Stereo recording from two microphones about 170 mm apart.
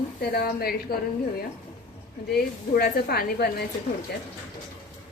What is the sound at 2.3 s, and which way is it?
A woman's voice, 65° left (ahead or behind).